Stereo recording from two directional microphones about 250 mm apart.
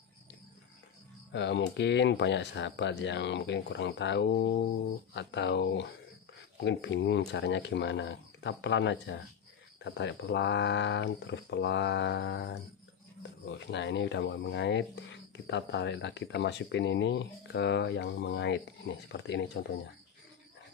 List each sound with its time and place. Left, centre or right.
1.3 s speech: left